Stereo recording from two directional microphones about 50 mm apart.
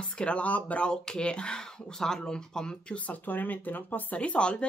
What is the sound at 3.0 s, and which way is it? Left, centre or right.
Speech, left.